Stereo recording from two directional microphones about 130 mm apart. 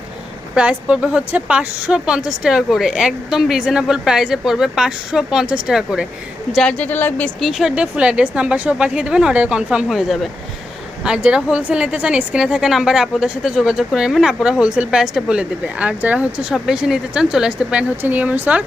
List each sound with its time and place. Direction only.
0.5 s a woman's voice: 10° right (ahead or behind); by 7.3 s 15° left (ahead or behind)
7.3 s a woman's voice: centre (ahead or behind)